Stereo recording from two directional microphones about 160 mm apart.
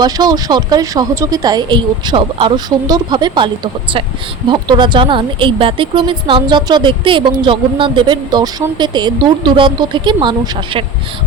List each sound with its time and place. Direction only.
0.0 s speech: 25° right (ahead or behind)